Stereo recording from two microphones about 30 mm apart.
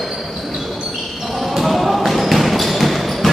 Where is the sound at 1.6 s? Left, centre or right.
Centre.